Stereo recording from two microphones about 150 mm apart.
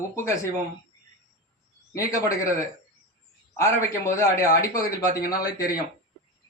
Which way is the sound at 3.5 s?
20° left (ahead or behind).